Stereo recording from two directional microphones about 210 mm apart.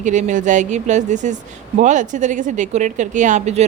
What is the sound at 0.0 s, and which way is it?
Speech, 35° right (ahead or behind).